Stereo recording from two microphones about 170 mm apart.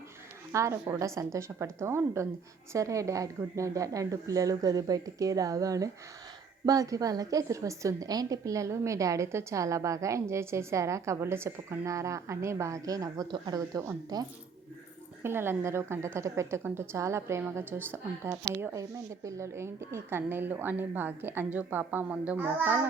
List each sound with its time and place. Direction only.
0.5 s a woman's voice: 15° right (ahead or behind)